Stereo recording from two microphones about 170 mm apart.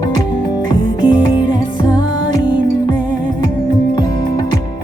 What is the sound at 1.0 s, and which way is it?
Music, 30° left (ahead or behind).